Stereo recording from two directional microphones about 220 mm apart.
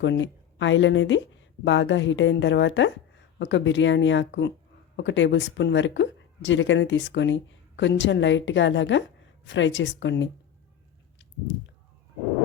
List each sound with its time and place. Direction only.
0.0 s speech: 55° left (ahead or behind)